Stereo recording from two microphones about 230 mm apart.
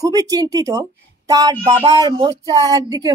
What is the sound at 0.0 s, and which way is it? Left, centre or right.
Speech, centre.